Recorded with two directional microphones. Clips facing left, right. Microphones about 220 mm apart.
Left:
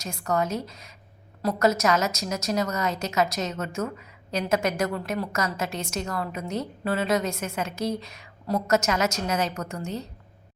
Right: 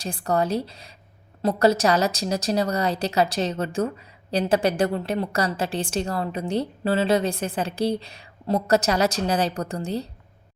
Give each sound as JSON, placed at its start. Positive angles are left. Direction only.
{"t": 0.0, "sound": "a woman's voice", "side_deg": -30}